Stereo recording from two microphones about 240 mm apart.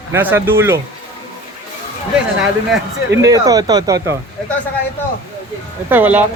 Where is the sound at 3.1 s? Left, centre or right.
Centre.